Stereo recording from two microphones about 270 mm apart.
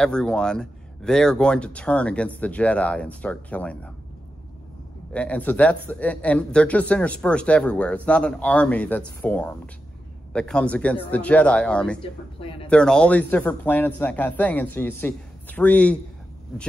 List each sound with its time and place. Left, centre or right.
0.0 s speech: centre
5.1 s speech: centre
12.4 s speech: left
12.6 s speech: centre